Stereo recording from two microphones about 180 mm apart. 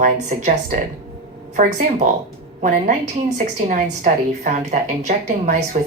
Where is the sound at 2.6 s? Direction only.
45° right (ahead or behind).